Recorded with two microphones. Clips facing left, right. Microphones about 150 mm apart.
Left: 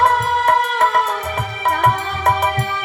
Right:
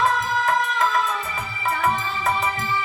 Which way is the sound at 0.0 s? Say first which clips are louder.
Left 6 dB; 70° left (ahead or behind).